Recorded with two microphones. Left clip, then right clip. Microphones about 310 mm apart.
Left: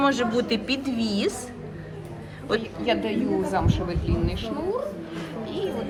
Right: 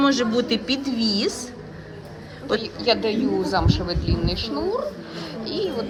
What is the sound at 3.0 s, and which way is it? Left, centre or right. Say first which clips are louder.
A woman's voice: right 3 dB; right.